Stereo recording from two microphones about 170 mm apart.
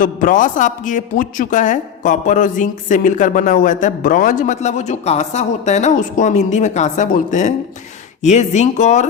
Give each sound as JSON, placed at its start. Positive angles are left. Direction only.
{"t": 0.0, "sound": "speech", "side_deg": 50}